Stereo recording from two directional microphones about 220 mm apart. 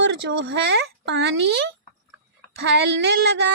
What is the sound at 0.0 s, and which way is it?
A woman's voice, 55° right (ahead or behind).